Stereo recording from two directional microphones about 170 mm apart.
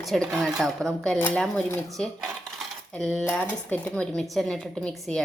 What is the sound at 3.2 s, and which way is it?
Speech, 10° left (ahead or behind).